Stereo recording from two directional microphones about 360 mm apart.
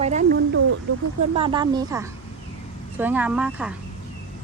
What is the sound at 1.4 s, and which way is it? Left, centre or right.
A woman's voice, centre.